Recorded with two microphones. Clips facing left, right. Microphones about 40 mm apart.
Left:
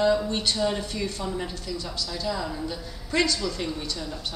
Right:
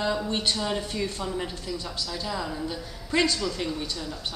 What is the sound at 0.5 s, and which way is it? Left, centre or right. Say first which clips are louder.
A woman's voice: left 2 dB; centre.